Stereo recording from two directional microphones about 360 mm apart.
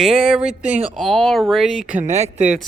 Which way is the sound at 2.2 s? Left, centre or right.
Centre.